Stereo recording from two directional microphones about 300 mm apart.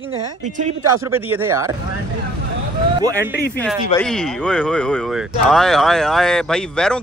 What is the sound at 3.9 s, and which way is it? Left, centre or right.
Speech, centre.